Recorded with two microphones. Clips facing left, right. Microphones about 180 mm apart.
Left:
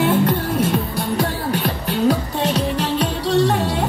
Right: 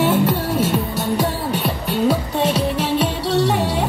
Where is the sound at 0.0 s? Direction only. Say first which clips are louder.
Even; centre (ahead or behind).